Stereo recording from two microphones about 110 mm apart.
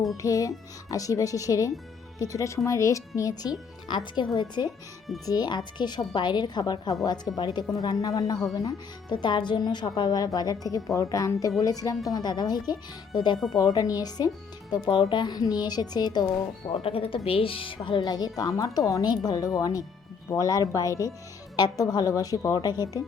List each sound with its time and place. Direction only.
0.2 s speech: 30° left (ahead or behind)
3.8 s speech: 45° left (ahead or behind)
14.8 s speech: 50° left (ahead or behind)
16.7 s speech: 60° left (ahead or behind); by 23.0 s 30° left (ahead or behind)